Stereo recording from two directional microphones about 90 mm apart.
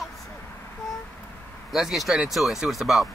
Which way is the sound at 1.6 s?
5° right (ahead or behind).